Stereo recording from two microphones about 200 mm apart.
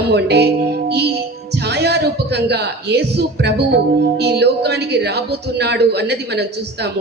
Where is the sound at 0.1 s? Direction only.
55° right (ahead or behind).